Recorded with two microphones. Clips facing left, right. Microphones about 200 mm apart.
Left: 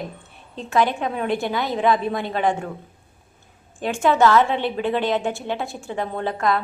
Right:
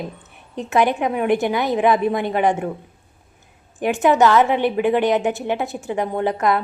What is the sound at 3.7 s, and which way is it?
A woman's voice, 20° right (ahead or behind).